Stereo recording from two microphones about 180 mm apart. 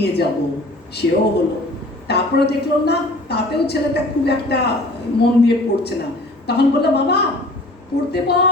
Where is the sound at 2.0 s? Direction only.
65° left (ahead or behind).